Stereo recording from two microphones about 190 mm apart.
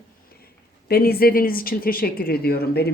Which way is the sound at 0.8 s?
55° left (ahead or behind).